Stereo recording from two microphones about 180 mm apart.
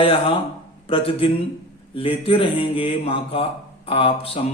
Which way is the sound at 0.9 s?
30° left (ahead or behind).